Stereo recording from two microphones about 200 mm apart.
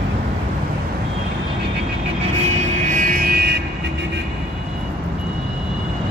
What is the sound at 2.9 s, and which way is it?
Vehicle, 45° right (ahead or behind).